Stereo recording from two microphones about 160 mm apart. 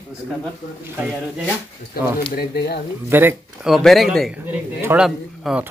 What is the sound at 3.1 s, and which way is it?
Speech, 15° right (ahead or behind).